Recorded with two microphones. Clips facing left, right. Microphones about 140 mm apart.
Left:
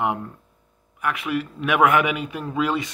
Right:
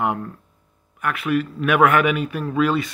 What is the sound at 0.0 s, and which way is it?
A man's voice, 15° left (ahead or behind).